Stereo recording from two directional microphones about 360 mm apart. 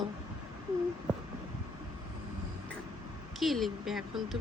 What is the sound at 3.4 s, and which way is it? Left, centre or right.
Speech, centre.